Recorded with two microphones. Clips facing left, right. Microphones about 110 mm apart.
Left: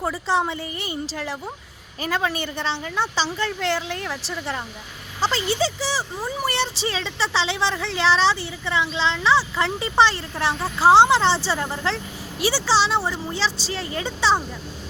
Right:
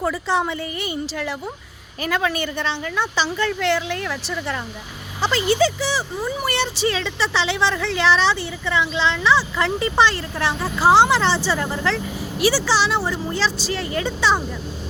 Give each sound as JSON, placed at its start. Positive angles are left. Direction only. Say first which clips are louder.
{"t": 0.0, "sound": "a woman's voice", "louder": "right 1 dB", "side_deg": 30}